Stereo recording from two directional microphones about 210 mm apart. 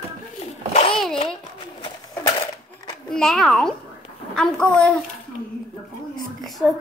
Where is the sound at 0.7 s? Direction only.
30° left (ahead or behind).